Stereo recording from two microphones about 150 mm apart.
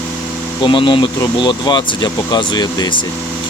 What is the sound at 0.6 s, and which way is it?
Speech, 30° left (ahead or behind).